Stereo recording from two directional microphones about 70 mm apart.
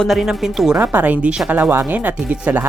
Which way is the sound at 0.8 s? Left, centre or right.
Right.